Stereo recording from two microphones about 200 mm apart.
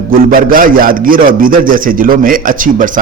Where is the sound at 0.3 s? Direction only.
45° right (ahead or behind).